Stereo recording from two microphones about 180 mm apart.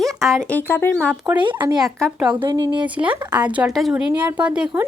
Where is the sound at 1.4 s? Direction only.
25° right (ahead or behind).